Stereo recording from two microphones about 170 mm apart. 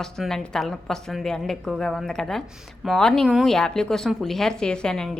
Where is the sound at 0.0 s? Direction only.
Centre (ahead or behind).